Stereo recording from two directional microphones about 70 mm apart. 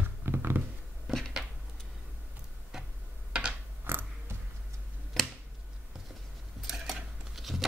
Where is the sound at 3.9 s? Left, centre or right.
Right.